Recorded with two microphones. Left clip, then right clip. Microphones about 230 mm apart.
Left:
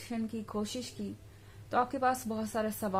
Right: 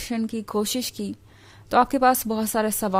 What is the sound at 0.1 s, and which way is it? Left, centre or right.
A woman's voice, right.